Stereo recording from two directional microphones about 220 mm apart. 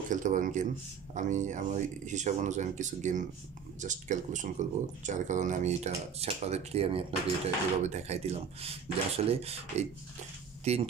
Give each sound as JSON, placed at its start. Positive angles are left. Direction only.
{"t": 0.1, "sound": "speech", "side_deg": -35}